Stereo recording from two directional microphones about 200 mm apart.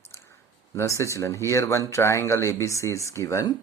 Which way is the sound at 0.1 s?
15° left (ahead or behind).